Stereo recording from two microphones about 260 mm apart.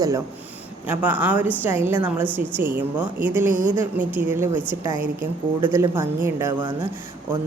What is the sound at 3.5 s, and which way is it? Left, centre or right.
Speech, right.